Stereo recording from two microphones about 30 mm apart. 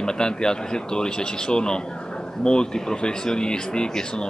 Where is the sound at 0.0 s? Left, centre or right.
Left.